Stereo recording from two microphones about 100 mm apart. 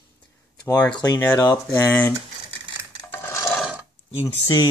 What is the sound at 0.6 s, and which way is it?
Speech, 35° left (ahead or behind).